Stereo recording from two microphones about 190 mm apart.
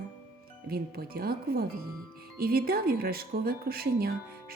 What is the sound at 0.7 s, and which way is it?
Speech, 55° right (ahead or behind).